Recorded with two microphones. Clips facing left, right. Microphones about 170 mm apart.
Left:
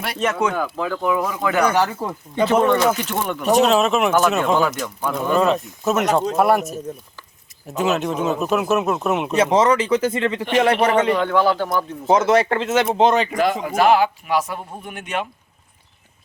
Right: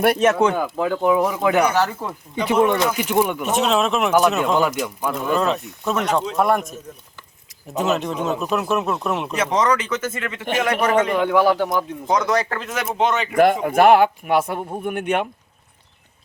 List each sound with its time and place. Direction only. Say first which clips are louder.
0.2 s speech: right 4 dB; 25° right (ahead or behind)
1.7 s speech: left 1 dB; 10° left (ahead or behind)
2.5 s speech: even; 15° right (ahead or behind); by 4.6 s centre (ahead or behind)
4.8 s speech: right 1 dB; 10° right (ahead or behind)
5.3 s speech: left 4 dB; 5° left (ahead or behind)
7.8 s speech: left 1 dB; centre (ahead or behind)
9.3 s speech: left 4 dB; 30° left (ahead or behind)
11.1 s speech: right 1 dB; 10° right (ahead or behind)
12.0 s speech: left 6 dB; 25° left (ahead or behind)
13.3 s speech: right 4 dB; 55° right (ahead or behind)